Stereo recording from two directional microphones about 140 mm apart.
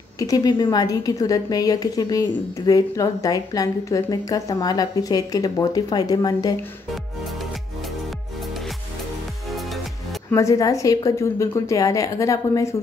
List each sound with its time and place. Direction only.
0.2 s a woman's voice: 25° left (ahead or behind)
10.3 s a woman's voice: 25° left (ahead or behind)